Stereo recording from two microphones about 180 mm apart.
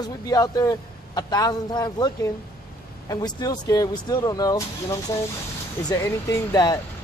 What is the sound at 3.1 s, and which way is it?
A man's voice, 20° left (ahead or behind).